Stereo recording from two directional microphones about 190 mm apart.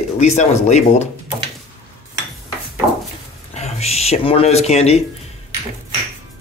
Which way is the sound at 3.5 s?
35° left (ahead or behind).